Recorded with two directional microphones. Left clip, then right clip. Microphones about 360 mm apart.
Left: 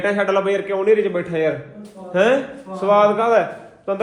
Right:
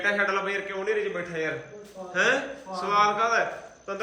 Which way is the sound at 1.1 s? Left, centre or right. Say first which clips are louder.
Left 9 dB; centre.